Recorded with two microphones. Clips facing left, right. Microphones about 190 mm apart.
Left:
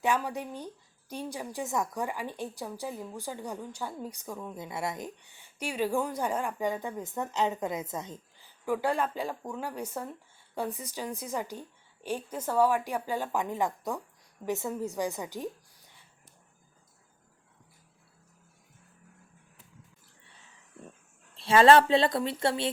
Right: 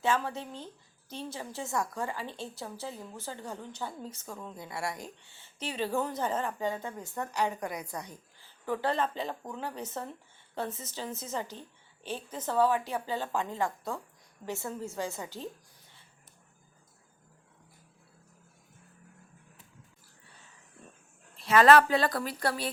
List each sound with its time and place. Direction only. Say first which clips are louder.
0.0 s a woman's voice: left 1 dB; 15° left (ahead or behind)
8.6 s a woman's voice: left 2 dB; 10° left (ahead or behind)
21.3 s a woman's voice: left 1 dB; 30° left (ahead or behind)